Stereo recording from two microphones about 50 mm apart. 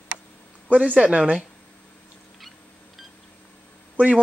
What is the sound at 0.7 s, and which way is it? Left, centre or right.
Speech, right.